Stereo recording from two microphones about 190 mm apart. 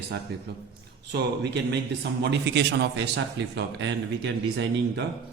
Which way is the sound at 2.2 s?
65° right (ahead or behind).